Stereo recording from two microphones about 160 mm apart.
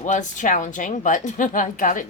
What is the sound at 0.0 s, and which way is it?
A woman's voice, 50° left (ahead or behind).